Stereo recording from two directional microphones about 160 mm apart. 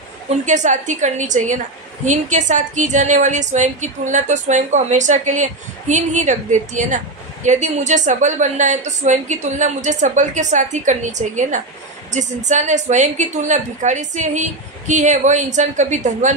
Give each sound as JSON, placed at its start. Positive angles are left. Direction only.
{"t": 0.5, "sound": "a woman's voice", "side_deg": -50}